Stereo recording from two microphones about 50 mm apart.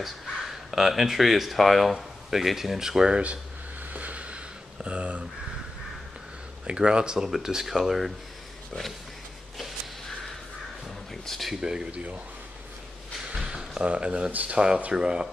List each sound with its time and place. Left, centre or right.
0.0 s speech: centre
3.9 s boat: right
4.7 s speech: right
6.7 s speech: centre
7.2 s speech: centre
11.2 s speech: centre
11.5 s speech: centre
11.9 s speech: right
13.3 s a sound: centre
14.3 s speech: right